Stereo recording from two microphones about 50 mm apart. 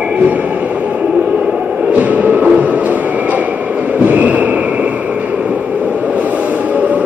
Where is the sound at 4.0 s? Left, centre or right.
Right.